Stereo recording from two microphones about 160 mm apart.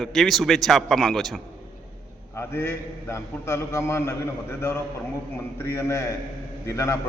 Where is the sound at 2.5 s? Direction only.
15° left (ahead or behind).